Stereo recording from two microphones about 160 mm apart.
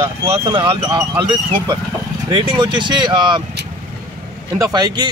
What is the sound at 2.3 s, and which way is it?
Speech, 30° right (ahead or behind).